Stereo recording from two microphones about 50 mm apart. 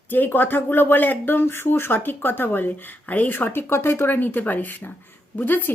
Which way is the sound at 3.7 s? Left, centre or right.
Left.